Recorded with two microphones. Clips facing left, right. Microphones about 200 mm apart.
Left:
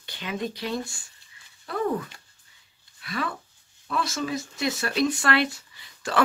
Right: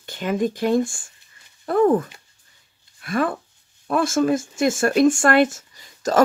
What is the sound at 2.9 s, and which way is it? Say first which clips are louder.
Speech: right 9 dB; 50° right (ahead or behind).